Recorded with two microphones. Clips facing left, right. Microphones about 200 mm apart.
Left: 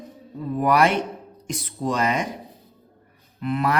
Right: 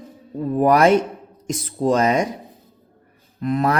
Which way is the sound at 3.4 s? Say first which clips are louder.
Right 4 dB; 40° right (ahead or behind).